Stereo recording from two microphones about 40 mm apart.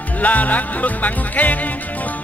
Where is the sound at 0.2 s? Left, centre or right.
Left.